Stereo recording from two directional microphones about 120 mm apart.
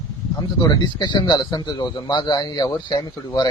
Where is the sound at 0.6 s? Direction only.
35° left (ahead or behind).